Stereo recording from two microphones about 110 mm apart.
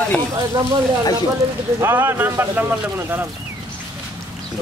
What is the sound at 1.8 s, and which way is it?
Speech, 20° right (ahead or behind).